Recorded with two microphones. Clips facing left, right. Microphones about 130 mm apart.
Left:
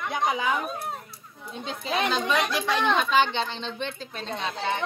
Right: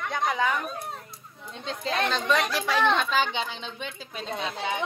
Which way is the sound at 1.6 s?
5° left (ahead or behind).